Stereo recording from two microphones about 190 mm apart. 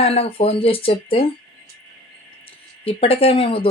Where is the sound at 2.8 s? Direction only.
30° left (ahead or behind).